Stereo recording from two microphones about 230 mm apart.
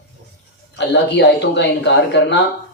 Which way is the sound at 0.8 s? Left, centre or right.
Left.